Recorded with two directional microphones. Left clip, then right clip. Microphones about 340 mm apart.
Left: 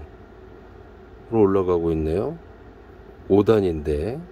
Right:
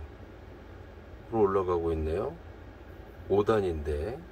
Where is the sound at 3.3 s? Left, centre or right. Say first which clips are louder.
Left 8 dB; left.